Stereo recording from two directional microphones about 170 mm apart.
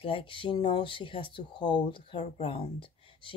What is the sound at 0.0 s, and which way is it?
Speech, 30° left (ahead or behind).